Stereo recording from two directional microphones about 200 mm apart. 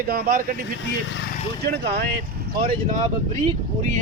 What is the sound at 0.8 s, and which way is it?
Speech, 70° left (ahead or behind).